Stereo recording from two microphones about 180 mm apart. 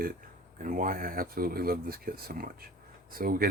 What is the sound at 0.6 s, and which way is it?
Speech, 45° right (ahead or behind).